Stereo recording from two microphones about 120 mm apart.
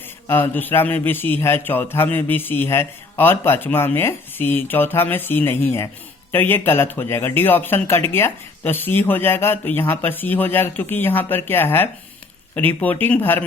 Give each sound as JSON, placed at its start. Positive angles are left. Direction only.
{"t": 0.3, "sound": "a man's voice", "side_deg": 20}